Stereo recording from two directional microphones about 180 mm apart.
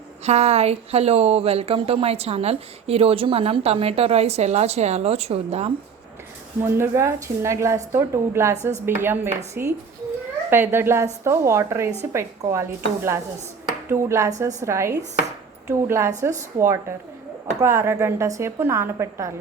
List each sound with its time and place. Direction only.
0.3 s speech: 35° right (ahead or behind)
6.6 s a woman's voice: 15° right (ahead or behind)